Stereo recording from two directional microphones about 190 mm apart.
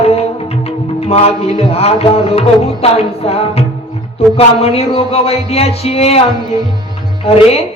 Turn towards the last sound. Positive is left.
turn(degrees=30)  # may be behind; listen again after turning